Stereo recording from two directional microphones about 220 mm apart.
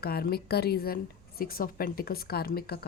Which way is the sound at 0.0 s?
45° left (ahead or behind).